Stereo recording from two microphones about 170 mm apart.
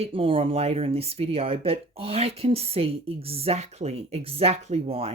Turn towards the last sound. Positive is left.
turn(degrees=-35)  # may be behind; listen again after turning